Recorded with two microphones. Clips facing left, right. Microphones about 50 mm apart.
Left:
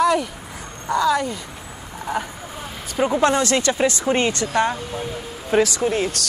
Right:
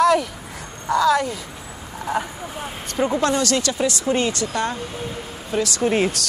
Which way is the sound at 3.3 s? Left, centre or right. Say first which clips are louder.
Left 2 dB; left.